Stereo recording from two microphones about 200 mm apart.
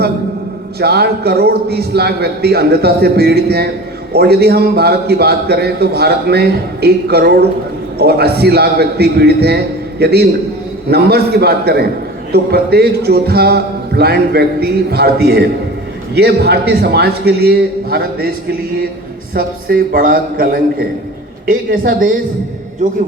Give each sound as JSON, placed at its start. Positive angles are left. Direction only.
{"t": 0.8, "sound": "a man's voice", "side_deg": -55}
{"t": 19.3, "sound": "a man's voice", "side_deg": -45}